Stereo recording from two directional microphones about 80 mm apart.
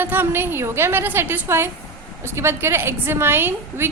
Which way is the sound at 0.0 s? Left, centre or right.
Right.